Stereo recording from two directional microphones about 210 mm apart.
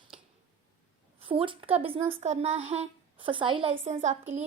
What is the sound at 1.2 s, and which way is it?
A woman's voice, 25° right (ahead or behind).